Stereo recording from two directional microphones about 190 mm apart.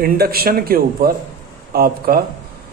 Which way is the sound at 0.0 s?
55° right (ahead or behind).